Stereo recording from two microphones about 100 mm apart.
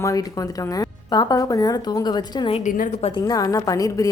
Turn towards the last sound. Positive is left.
turn(degrees=35)  # may be behind; listen again after turning